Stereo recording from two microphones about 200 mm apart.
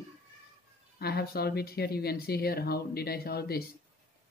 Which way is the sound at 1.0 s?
55° left (ahead or behind).